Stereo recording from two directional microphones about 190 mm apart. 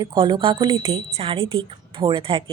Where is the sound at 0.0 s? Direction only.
20° right (ahead or behind).